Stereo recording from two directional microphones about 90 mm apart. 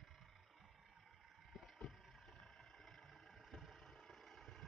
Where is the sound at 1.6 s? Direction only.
5° left (ahead or behind).